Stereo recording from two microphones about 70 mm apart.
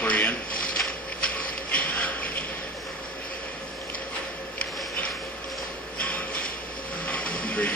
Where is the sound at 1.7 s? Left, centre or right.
Left.